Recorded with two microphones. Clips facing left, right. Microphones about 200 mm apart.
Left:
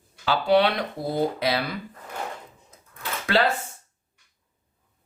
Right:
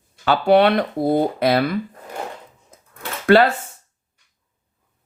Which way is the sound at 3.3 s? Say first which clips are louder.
Right 10 dB; 55° right (ahead or behind).